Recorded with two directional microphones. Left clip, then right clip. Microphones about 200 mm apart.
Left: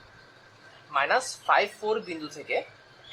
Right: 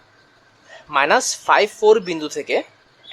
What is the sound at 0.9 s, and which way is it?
Speech, 55° right (ahead or behind).